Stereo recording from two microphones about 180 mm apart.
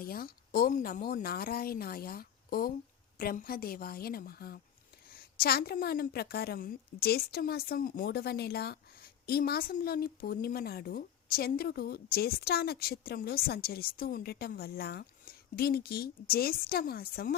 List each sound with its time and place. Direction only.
0.0 s a woman's voice: 55° left (ahead or behind)